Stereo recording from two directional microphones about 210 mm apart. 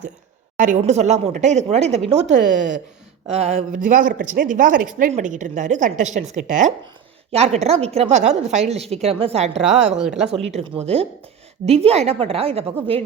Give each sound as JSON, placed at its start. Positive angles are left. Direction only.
{"t": 0.5, "sound": "a woman's voice", "side_deg": -35}
{"t": 10.0, "sound": "speech", "side_deg": 0}
{"t": 10.5, "sound": "a woman's voice", "side_deg": -30}